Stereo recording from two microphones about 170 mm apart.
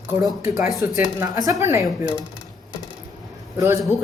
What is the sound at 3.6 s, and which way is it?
Speech, 15° right (ahead or behind).